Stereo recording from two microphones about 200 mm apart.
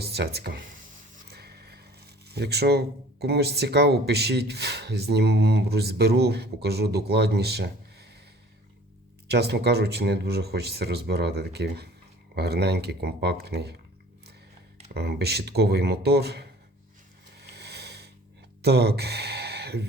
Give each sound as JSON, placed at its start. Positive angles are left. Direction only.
{"t": 0.0, "sound": "a sound", "side_deg": -55}
{"t": 0.3, "sound": "speech", "side_deg": -55}
{"t": 9.3, "sound": "speech", "side_deg": -55}
{"t": 14.9, "sound": "speech", "side_deg": -55}
{"t": 17.5, "sound": "snoring", "side_deg": -55}
{"t": 18.6, "sound": "speech", "side_deg": -55}